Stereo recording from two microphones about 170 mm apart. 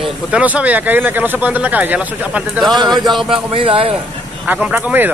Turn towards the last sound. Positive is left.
turn(degrees=-10)  # may be behind; listen again after turning